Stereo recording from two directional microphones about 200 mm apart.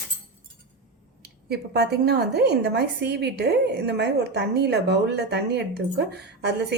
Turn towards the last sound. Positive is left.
turn(degrees=-55)  # may be behind; listen again after turning